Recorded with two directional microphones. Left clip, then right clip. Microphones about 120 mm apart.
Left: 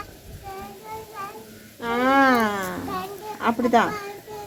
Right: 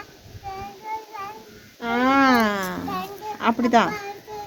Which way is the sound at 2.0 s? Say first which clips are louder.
Even; 35° right (ahead or behind).